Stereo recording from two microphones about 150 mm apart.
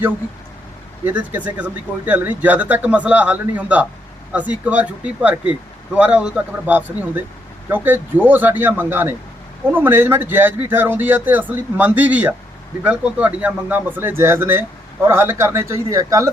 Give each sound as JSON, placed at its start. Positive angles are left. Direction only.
{"t": 1.0, "sound": "a man's voice", "side_deg": -10}